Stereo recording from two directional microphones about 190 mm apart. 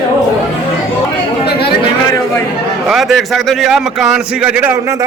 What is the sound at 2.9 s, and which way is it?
A man's voice, centre (ahead or behind).